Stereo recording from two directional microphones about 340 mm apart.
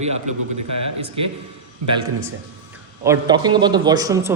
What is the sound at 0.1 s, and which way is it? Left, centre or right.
Speech, right.